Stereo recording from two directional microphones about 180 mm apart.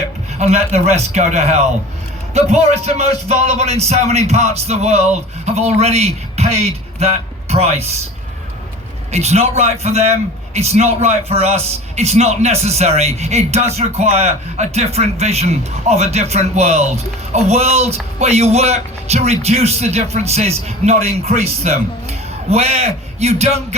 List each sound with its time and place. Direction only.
0.3 s a man's voice: 40° right (ahead or behind)
9.1 s a man's voice: 35° right (ahead or behind)